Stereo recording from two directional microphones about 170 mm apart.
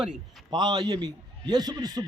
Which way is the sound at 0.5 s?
25° right (ahead or behind).